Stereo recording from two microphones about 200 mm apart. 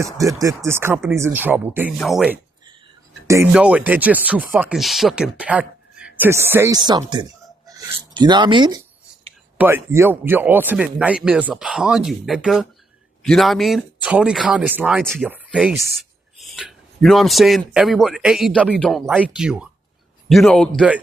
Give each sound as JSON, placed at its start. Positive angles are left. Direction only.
{"t": 0.0, "sound": "speech", "side_deg": -15}
{"t": 3.2, "sound": "speech", "side_deg": -15}
{"t": 9.6, "sound": "speech", "side_deg": -10}